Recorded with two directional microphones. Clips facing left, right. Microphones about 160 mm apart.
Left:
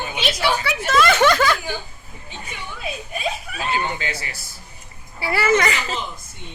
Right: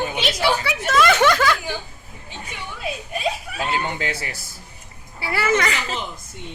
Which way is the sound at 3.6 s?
50° right (ahead or behind).